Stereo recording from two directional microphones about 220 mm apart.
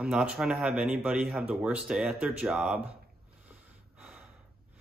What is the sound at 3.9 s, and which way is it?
Gasp, 5° right (ahead or behind).